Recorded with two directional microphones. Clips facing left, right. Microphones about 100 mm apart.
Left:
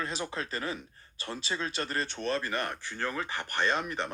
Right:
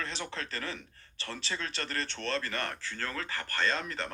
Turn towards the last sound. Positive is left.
turn(degrees=15)  # may be behind; listen again after turning